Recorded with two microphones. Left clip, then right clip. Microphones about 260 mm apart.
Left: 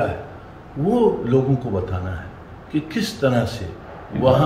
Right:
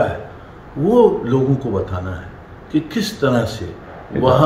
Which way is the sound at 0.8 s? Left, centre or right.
Centre.